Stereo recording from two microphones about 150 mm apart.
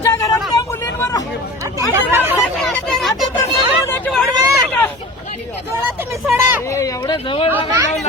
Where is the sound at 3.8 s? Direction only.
15° left (ahead or behind).